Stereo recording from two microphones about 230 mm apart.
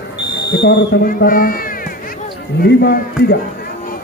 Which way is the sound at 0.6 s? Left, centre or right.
Left.